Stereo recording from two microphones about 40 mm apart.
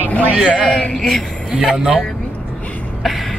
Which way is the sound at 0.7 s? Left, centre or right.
Centre.